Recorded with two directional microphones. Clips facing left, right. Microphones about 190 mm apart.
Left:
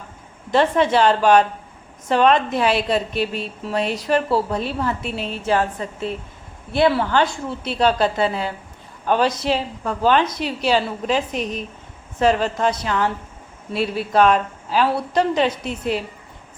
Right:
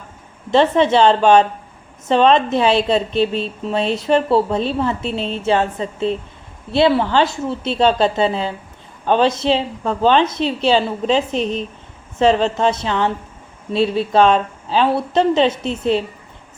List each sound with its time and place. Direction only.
0.5 s a woman's voice: 25° right (ahead or behind)